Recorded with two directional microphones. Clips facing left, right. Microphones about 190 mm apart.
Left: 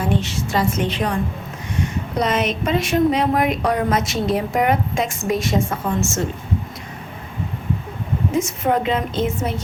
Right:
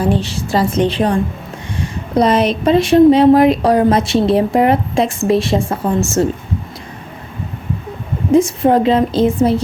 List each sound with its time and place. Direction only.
0.0 s a woman's voice: 35° right (ahead or behind)
8.3 s a woman's voice: 30° right (ahead or behind)